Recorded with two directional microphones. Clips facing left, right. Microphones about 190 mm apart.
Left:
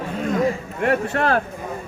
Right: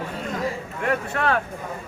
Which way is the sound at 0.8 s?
35° left (ahead or behind).